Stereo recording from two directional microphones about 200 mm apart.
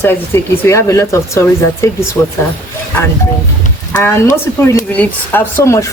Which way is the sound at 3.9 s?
15° left (ahead or behind).